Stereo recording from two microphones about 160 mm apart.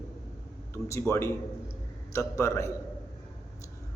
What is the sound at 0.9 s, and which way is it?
A man's voice, 15° left (ahead or behind).